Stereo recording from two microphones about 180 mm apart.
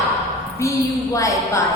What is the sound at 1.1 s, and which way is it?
Speech, 15° left (ahead or behind).